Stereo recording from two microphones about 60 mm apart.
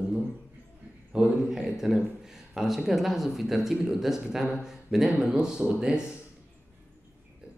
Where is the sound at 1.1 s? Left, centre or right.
Centre.